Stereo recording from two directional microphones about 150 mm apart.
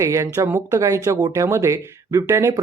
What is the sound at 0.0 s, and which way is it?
Speech, 20° right (ahead or behind).